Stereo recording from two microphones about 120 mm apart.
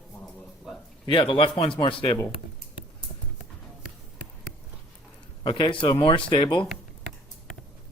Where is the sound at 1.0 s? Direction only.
45° left (ahead or behind).